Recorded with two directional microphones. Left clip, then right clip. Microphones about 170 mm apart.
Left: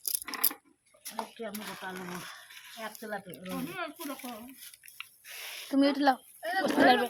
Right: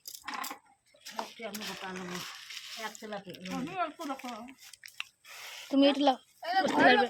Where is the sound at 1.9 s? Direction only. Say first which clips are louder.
Even; 45° left (ahead or behind).